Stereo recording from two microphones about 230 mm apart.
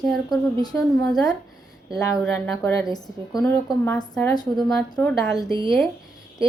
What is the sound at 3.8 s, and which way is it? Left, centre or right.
Speech, centre.